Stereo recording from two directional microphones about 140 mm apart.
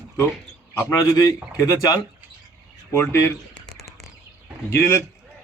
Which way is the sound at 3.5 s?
5° left (ahead or behind).